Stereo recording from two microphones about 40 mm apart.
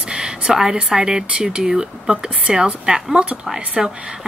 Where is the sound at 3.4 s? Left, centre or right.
Centre.